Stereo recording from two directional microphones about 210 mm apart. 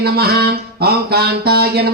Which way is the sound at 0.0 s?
50° right (ahead or behind).